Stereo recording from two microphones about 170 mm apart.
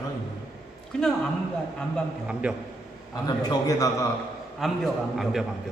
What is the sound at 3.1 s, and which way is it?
Speech, 25° left (ahead or behind).